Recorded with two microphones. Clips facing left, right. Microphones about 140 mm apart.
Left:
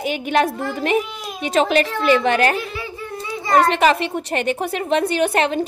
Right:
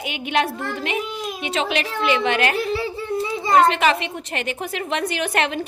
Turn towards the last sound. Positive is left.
turn(degrees=30)  # may be behind; listen again after turning